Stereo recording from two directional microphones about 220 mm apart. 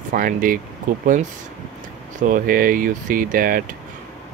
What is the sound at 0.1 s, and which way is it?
Speech, 40° right (ahead or behind).